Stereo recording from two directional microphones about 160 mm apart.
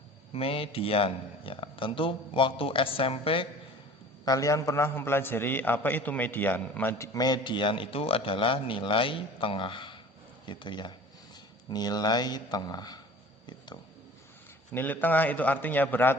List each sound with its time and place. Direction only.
0.3 s speech: 35° left (ahead or behind)
4.3 s a man's voice: 20° left (ahead or behind)
14.7 s a man's voice: 10° left (ahead or behind)